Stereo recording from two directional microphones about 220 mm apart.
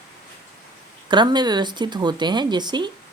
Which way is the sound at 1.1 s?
20° right (ahead or behind).